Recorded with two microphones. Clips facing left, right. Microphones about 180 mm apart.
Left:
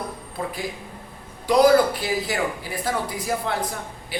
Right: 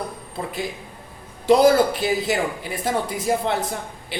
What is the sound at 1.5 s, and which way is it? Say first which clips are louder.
Speech: right 1 dB; 25° right (ahead or behind).